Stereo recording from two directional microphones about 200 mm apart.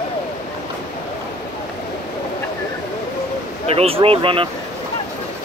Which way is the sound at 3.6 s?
30° right (ahead or behind).